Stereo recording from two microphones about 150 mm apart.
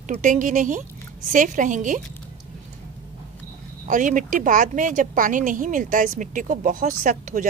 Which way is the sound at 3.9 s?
60° right (ahead or behind).